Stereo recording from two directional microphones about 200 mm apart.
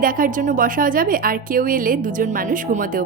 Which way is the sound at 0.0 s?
45° right (ahead or behind).